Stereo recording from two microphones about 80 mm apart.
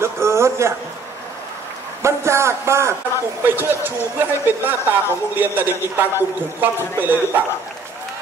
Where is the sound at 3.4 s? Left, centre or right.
Right.